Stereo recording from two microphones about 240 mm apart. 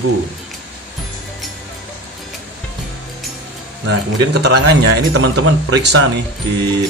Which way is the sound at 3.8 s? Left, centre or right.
Right.